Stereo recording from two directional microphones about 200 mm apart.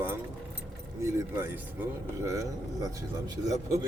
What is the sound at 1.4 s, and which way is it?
Speech, 10° right (ahead or behind).